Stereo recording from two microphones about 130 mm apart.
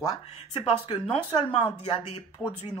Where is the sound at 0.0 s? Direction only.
40° left (ahead or behind).